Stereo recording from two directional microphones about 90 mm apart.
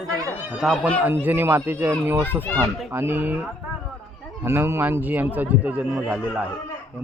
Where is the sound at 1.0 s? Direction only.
20° right (ahead or behind).